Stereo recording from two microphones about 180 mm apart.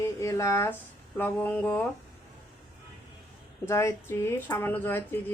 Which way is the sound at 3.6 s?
15° left (ahead or behind).